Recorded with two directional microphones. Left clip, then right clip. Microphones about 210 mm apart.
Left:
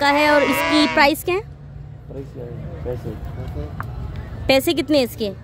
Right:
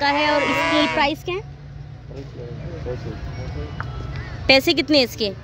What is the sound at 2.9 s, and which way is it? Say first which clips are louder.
Speech: left 2 dB; 40° left (ahead or behind).